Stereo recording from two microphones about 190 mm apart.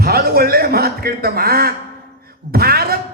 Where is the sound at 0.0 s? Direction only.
55° right (ahead or behind).